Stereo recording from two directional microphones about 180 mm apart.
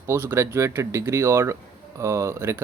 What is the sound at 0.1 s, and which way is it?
A man's voice, 15° right (ahead or behind).